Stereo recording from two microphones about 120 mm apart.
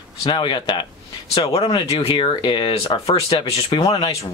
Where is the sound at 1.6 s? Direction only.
40° left (ahead or behind); by 3.7 s 55° left (ahead or behind).